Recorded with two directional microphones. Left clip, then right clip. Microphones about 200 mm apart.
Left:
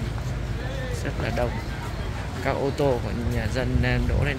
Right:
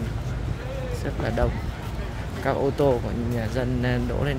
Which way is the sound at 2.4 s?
20° right (ahead or behind).